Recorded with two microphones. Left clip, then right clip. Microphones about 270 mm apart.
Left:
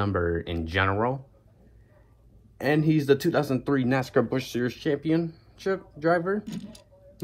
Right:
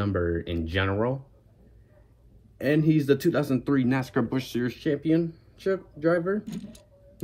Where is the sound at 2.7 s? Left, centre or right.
Centre.